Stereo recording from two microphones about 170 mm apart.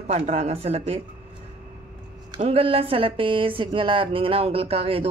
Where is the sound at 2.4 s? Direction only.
35° right (ahead or behind).